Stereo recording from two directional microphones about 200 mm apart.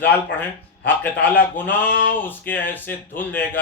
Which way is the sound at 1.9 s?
65° left (ahead or behind).